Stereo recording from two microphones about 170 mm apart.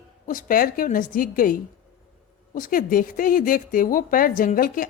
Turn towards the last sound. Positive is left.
turn(degrees=55)  # may be behind; listen again after turning